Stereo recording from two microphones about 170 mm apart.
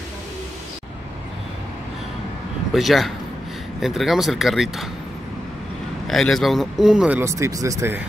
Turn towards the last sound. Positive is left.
turn(degrees=-15)  # may be behind; listen again after turning